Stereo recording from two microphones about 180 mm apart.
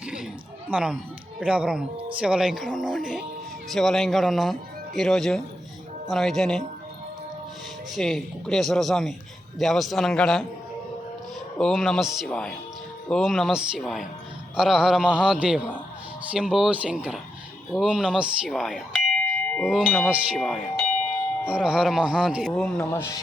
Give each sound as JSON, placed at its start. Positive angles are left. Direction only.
{"t": 0.0, "sound": "a sound", "side_deg": -5}
{"t": 0.7, "sound": "speech", "side_deg": -5}
{"t": 7.9, "sound": "speech", "side_deg": 0}
{"t": 11.5, "sound": "speech", "side_deg": 5}
{"t": 22.8, "sound": "speech", "side_deg": 15}